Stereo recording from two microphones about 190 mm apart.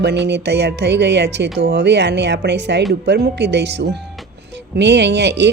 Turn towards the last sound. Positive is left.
turn(degrees=-65)  # may be behind; listen again after turning